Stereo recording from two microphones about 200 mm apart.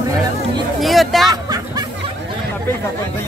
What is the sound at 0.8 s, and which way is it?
Speech, centre (ahead or behind).